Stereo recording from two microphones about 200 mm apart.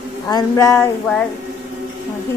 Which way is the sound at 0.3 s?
20° left (ahead or behind).